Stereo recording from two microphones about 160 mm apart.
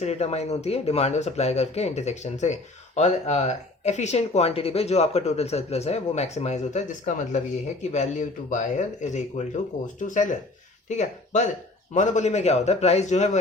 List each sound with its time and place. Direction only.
0.0 s speech: 45° left (ahead or behind)